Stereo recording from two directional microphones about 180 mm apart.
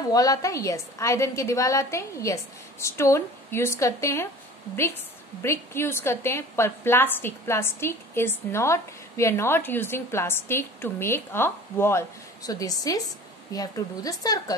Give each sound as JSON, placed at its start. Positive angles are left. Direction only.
{"t": 0.1, "sound": "a woman's voice", "side_deg": 20}
{"t": 5.4, "sound": "a woman's voice", "side_deg": 15}